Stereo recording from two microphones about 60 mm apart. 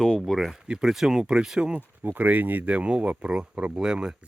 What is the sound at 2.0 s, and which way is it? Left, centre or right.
Speech, right.